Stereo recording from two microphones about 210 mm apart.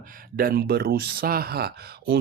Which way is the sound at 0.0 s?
40° right (ahead or behind).